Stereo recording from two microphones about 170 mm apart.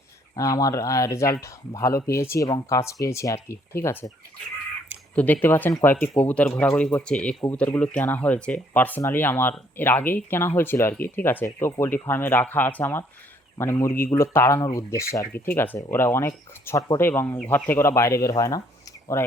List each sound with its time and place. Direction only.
0.3 s speech: 20° left (ahead or behind)
5.1 s speech: 10° left (ahead or behind)